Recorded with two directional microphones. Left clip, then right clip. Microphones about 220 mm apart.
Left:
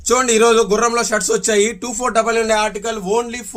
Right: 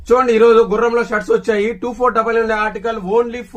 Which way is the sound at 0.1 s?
45° left (ahead or behind).